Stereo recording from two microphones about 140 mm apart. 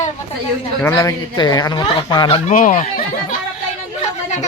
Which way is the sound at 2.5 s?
70° left (ahead or behind).